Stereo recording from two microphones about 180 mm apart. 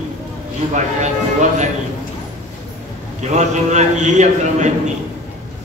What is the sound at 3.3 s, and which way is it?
A man's voice, 40° right (ahead or behind).